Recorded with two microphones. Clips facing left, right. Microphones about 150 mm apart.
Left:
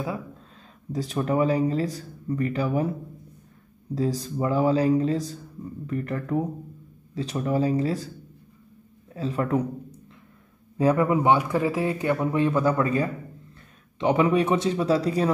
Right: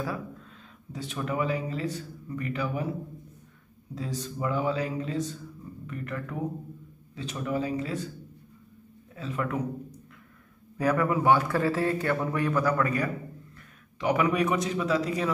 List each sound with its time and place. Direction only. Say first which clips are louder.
0.9 s speech: left 7 dB; 35° left (ahead or behind)
3.9 s speech: left 8 dB; 35° left (ahead or behind)
9.1 s a man's voice: left 6 dB; 35° left (ahead or behind)